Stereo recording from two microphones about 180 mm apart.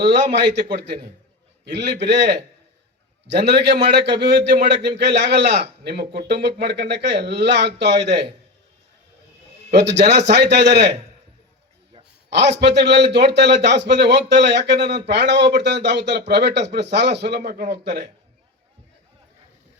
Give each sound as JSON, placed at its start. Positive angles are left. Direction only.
{"t": 0.0, "sound": "a man's voice", "side_deg": -70}
{"t": 9.7, "sound": "a man's voice", "side_deg": -70}
{"t": 12.3, "sound": "a man's voice", "side_deg": -70}